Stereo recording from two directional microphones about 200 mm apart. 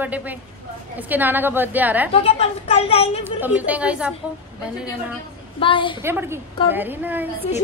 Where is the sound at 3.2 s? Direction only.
10° right (ahead or behind).